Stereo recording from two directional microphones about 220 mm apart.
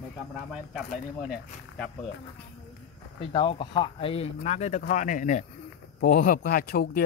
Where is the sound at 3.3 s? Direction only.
20° left (ahead or behind).